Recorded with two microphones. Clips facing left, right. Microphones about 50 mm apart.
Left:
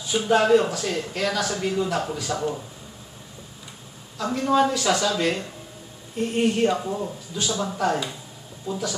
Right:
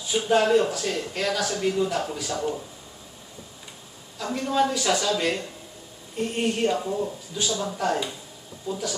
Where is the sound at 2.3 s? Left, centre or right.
Left.